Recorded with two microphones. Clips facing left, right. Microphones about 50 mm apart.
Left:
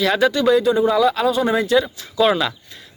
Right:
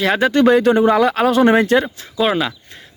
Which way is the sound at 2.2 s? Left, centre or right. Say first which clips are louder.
Even; centre.